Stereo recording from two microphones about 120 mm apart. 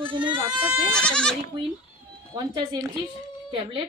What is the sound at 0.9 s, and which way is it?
Speech, 5° left (ahead or behind).